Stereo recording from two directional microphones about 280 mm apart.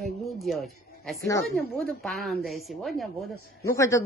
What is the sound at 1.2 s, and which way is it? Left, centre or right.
Speech, centre.